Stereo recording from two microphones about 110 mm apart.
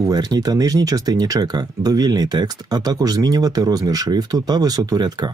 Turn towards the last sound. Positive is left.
turn(degrees=-35)  # may be behind; listen again after turning